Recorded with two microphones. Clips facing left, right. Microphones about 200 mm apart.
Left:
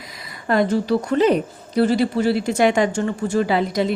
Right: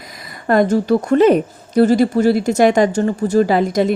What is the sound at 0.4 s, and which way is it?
A woman's voice, 45° right (ahead or behind).